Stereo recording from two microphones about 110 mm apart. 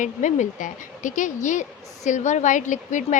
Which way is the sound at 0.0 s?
90° left.